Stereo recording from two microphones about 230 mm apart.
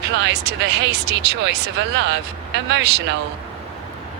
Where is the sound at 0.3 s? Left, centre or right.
Right.